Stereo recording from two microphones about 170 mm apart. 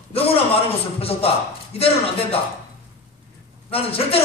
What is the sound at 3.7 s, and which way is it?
Speech, 35° left (ahead or behind).